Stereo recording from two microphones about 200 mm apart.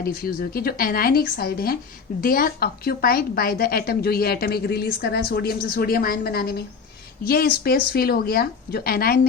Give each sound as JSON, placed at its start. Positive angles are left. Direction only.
{"t": 0.0, "sound": "a woman's voice", "side_deg": 50}